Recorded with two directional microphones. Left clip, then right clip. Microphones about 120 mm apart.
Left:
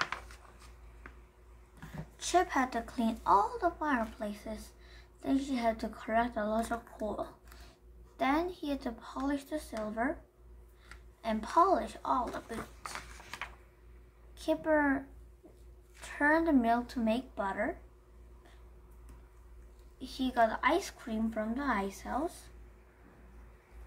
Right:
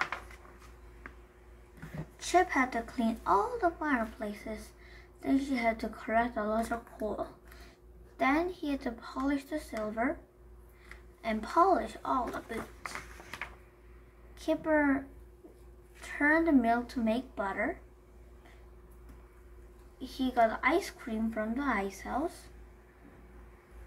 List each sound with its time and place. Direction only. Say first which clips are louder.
2.1 s speech: right 2 dB; 30° left (ahead or behind)
11.2 s speech: right 1 dB; 25° left (ahead or behind)
14.4 s speech: right 1 dB; 25° left (ahead or behind)
20.0 s speech: right 1 dB; 30° left (ahead or behind)